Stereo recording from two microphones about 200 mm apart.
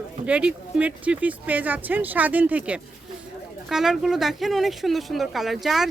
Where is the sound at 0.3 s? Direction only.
5° right (ahead or behind).